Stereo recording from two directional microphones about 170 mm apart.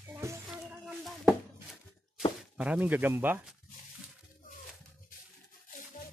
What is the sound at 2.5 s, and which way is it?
Speech, 5° right (ahead or behind).